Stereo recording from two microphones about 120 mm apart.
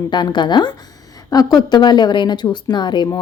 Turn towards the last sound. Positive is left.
turn(degrees=40)  # may be behind; listen again after turning